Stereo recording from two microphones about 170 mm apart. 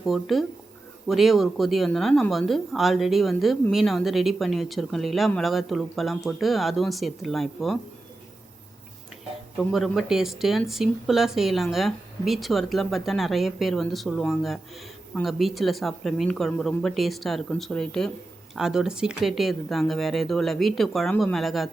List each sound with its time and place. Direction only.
0.0 s speech: centre (ahead or behind)
9.6 s speech: centre (ahead or behind)